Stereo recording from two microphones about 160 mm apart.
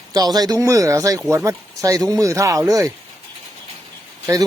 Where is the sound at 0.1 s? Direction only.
25° right (ahead or behind).